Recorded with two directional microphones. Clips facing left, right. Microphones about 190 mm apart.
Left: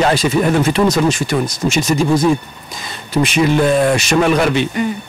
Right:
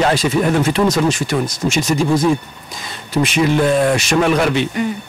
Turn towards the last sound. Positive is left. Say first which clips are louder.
# left 1 dB
turn(degrees=15)  # may be behind; listen again after turning